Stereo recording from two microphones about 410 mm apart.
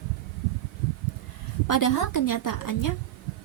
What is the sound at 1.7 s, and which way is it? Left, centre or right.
A woman's voice, left.